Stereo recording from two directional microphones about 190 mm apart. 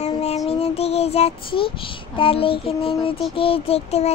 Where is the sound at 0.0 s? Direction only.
35° left (ahead or behind).